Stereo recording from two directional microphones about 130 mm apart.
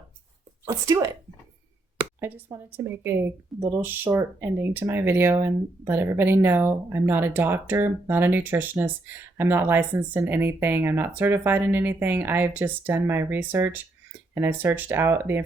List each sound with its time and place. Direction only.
0.6 s speech: 25° right (ahead or behind)
2.2 s speech: 15° right (ahead or behind)